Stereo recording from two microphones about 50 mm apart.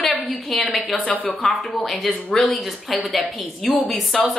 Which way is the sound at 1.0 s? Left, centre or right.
Left.